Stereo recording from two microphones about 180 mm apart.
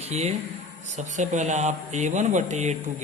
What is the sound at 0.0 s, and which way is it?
Speech, 35° right (ahead or behind).